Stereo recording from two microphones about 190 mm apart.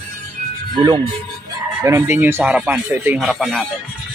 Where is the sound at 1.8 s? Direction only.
15° right (ahead or behind).